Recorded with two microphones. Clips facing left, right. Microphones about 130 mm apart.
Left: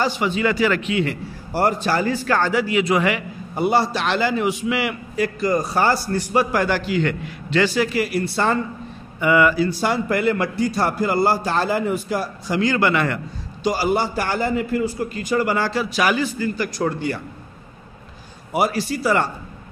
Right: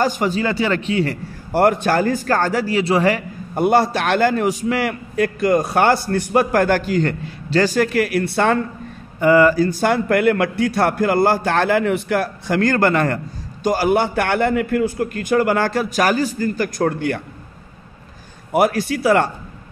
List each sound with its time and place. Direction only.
0.0 s a man's voice: 45° right (ahead or behind)
1.5 s a man's voice: 55° right (ahead or behind)
9.2 s a man's voice: 40° right (ahead or behind)
13.7 s a man's voice: 55° right (ahead or behind)
18.5 s a man's voice: 55° right (ahead or behind)